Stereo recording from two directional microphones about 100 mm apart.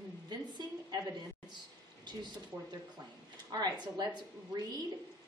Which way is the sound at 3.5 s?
45° right (ahead or behind).